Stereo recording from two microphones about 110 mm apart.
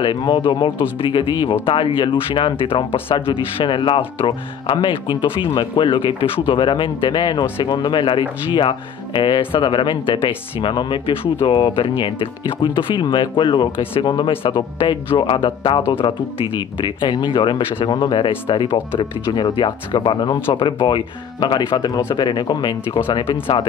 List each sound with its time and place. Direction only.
0.0 s speech: 45° left (ahead or behind)
23.4 s speech: 55° left (ahead or behind)